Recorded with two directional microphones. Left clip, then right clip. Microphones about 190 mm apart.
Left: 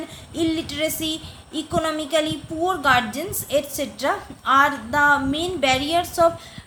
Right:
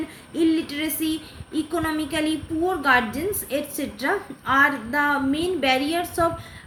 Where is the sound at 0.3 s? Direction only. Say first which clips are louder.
Right 1 dB; 35° left (ahead or behind).